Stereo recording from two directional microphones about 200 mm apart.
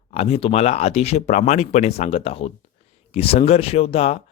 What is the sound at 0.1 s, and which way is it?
Speech, 30° left (ahead or behind).